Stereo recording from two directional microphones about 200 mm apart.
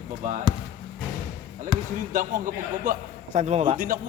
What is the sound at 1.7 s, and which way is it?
Speech, 20° right (ahead or behind).